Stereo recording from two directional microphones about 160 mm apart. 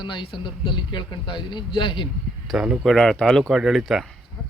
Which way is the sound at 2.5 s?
5° right (ahead or behind).